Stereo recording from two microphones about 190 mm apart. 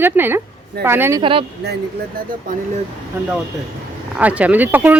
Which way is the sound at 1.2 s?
30° right (ahead or behind).